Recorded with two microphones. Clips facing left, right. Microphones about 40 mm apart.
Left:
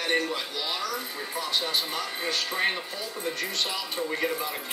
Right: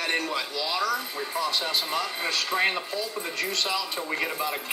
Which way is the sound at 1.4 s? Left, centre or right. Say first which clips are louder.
Right 1 dB; right.